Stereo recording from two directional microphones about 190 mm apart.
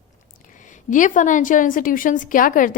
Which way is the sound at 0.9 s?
40° left (ahead or behind).